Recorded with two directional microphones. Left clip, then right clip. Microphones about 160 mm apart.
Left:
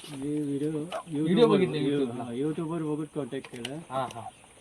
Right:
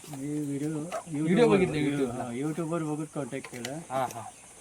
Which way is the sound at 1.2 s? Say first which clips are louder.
Left 1 dB; centre (ahead or behind).